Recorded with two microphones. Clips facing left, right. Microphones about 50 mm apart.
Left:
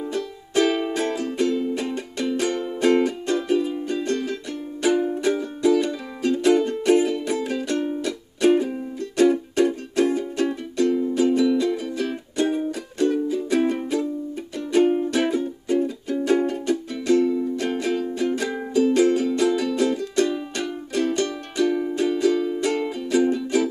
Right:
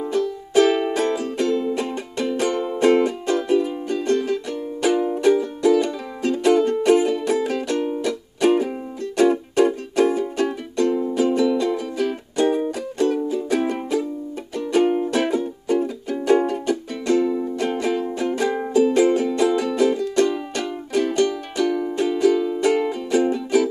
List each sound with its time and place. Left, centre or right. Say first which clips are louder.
0.7 s music: right 3 dB; centre
2.5 s music: right 3 dB; centre
2.8 s music: right 2 dB; centre
17.2 s music: even; centre
17.6 s music: right 2 dB; centre